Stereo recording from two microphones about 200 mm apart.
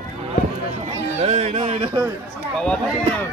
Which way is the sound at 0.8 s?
35° right (ahead or behind).